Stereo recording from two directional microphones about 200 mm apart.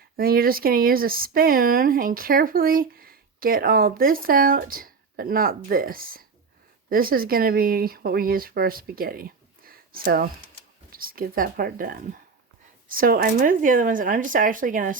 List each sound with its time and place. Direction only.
0.2 s speech: 45° right (ahead or behind)